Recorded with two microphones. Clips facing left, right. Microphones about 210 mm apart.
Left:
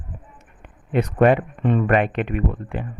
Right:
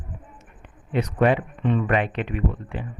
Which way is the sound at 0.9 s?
50° left (ahead or behind).